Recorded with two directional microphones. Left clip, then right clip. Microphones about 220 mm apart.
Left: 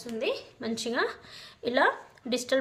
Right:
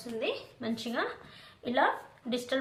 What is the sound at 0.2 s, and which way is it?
A woman's voice, 60° left (ahead or behind).